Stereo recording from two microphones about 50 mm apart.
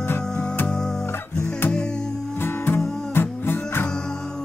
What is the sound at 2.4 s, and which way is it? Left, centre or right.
Music, left.